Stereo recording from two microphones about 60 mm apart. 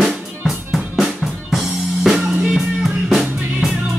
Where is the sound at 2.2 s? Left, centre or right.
Right.